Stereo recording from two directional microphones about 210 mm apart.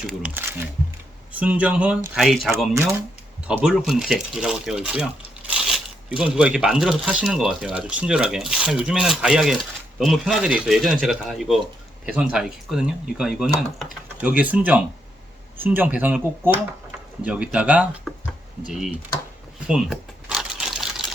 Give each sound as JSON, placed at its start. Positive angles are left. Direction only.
{"t": 0.1, "sound": "speech", "side_deg": -5}
{"t": 19.6, "sound": "typewriter", "side_deg": -5}